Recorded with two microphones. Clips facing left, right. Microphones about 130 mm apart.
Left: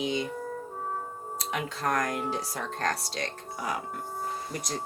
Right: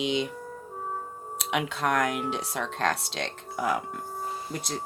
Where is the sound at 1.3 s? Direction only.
75° right (ahead or behind).